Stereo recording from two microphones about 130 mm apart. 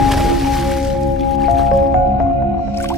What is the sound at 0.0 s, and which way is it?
Music, centre (ahead or behind).